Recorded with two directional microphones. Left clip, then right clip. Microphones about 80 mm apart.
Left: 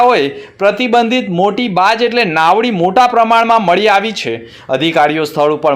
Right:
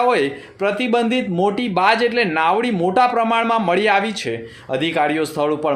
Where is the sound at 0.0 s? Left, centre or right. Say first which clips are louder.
Left 7 dB; left.